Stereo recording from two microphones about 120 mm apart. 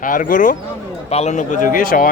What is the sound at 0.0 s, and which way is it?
Speech, 90° left.